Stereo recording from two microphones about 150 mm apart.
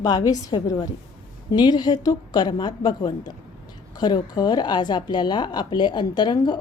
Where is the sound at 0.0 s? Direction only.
25° left (ahead or behind).